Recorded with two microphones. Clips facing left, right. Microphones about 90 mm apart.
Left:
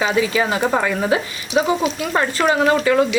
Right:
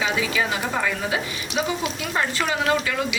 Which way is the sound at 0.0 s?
35° left (ahead or behind).